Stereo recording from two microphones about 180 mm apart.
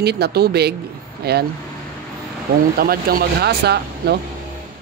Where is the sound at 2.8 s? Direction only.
55° right (ahead or behind).